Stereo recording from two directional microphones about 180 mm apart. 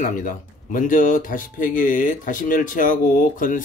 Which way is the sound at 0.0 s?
45° left (ahead or behind).